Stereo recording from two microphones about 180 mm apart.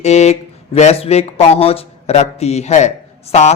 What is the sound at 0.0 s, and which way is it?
Speech, 40° left (ahead or behind).